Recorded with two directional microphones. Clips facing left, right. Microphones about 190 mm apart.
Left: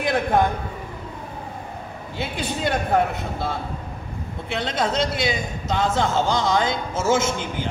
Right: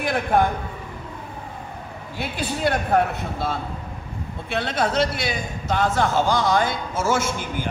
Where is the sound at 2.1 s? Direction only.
20° left (ahead or behind).